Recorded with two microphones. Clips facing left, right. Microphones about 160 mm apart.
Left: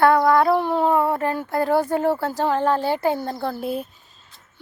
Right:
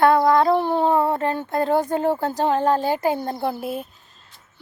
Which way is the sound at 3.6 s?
Centre (ahead or behind).